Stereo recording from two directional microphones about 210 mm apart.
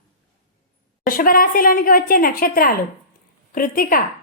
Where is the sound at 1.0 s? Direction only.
40° left (ahead or behind).